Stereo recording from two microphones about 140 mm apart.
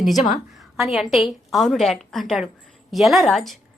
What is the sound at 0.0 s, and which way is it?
A woman's voice, centre (ahead or behind).